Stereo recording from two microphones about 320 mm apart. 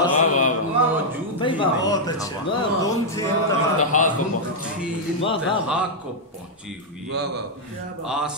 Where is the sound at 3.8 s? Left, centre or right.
Left.